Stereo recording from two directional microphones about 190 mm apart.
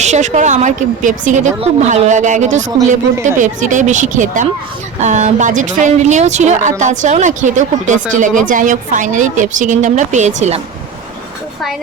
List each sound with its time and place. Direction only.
0.0 s speech: 40° right (ahead or behind)